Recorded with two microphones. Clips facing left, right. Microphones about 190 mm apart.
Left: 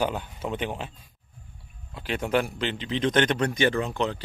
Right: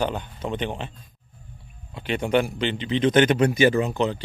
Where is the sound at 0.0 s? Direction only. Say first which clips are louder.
Right 1 dB; 5° left (ahead or behind).